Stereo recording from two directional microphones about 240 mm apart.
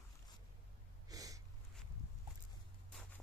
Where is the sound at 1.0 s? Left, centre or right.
Centre.